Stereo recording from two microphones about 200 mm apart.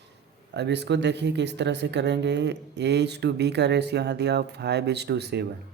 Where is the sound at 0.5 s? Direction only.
60° right (ahead or behind).